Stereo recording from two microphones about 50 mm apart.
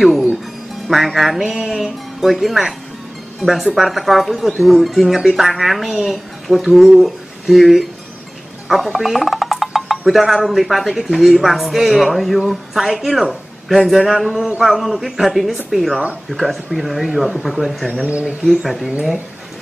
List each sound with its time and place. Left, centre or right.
0.0 s speech: centre